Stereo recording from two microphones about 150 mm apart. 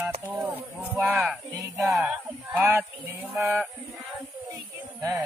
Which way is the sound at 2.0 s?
10° right (ahead or behind).